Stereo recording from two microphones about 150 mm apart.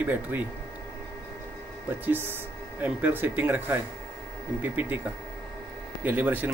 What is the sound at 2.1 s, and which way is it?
Speech, 15° right (ahead or behind).